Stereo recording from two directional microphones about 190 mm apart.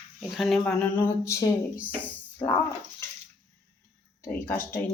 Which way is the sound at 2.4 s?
30° left (ahead or behind).